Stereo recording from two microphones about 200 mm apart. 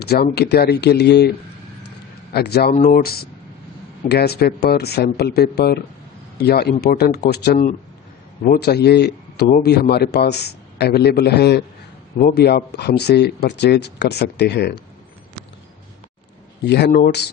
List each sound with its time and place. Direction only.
0.0 s speech: 55° left (ahead or behind)
2.3 s a man's voice: 50° left (ahead or behind)
16.6 s speech: 60° left (ahead or behind)